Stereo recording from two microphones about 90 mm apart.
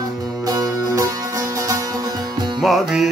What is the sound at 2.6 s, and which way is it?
Music, centre (ahead or behind).